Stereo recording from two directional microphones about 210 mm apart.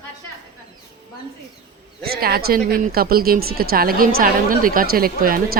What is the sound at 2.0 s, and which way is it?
Speech, 50° right (ahead or behind).